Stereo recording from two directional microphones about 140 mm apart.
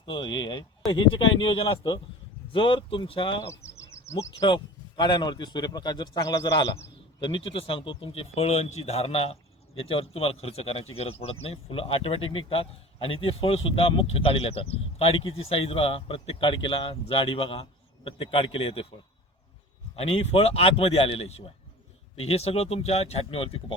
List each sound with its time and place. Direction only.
0.0 s speech: 35° left (ahead or behind)
3.4 s insect: 20° left (ahead or behind)
4.4 s a man's voice: 35° left (ahead or behind)
20.0 s a man's voice: 45° left (ahead or behind)